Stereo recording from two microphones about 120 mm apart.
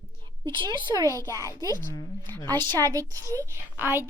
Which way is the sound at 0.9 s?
30° right (ahead or behind).